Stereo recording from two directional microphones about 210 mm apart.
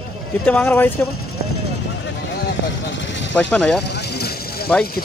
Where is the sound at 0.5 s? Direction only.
10° left (ahead or behind).